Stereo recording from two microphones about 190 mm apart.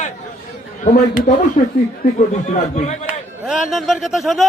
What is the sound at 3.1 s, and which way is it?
Speech, centre (ahead or behind).